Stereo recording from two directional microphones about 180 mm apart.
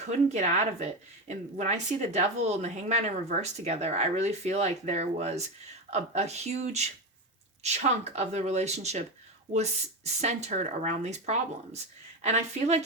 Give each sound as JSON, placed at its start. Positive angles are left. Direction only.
{"t": 0.0, "sound": "speech", "side_deg": -40}